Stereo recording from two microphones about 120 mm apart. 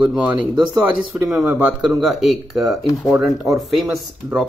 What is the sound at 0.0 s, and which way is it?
Speech, 5° right (ahead or behind).